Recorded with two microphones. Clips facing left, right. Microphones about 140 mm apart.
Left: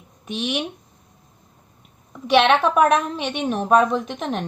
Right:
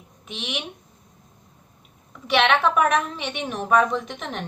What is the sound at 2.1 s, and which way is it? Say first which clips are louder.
Speech: left 4 dB; 25° left (ahead or behind).